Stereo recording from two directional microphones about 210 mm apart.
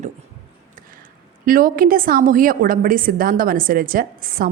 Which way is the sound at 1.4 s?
40° right (ahead or behind).